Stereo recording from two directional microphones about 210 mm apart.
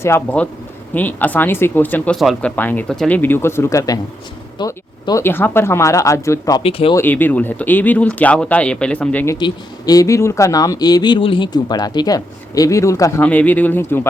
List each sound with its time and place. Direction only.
0.0 s speech: 10° left (ahead or behind)
6.6 s speech: 25° left (ahead or behind)
6.9 s speech: 10° left (ahead or behind)